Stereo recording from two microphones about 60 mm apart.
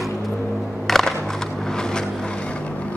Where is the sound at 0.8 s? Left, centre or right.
Centre.